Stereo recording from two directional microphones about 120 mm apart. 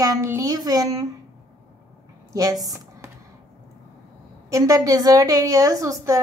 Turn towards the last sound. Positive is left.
turn(degrees=-25)  # may be behind; listen again after turning